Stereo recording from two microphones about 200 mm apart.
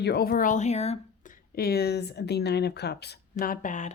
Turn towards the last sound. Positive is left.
turn(degrees=40)  # may be behind; listen again after turning